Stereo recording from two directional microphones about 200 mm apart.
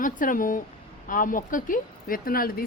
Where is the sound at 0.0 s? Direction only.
40° left (ahead or behind).